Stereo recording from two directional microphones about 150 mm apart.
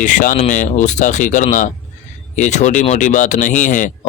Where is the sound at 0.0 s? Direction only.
60° left (ahead or behind).